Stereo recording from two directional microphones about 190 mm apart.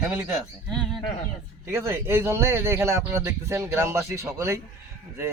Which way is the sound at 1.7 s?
15° right (ahead or behind).